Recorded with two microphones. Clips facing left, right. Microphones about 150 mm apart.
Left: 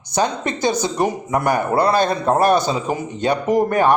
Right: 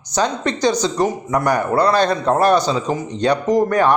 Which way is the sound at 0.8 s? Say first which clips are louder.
Right 1 dB; 15° left (ahead or behind).